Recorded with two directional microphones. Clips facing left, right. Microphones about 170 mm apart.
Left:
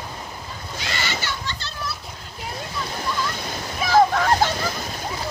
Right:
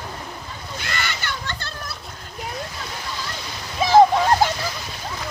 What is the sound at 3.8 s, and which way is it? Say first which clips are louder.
Waves: right 4 dB; 20° right (ahead or behind).